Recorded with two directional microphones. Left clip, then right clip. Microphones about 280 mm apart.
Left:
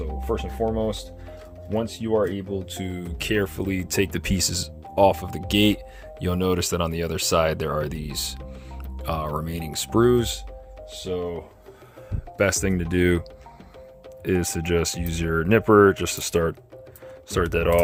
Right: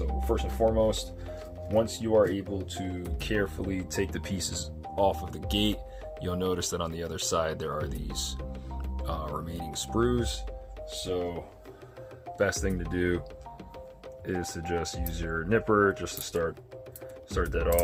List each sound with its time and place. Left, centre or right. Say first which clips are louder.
0.3 s speech: left 1 dB; left
12.4 s speech: left 6 dB; left
14.3 s speech: left 8 dB; left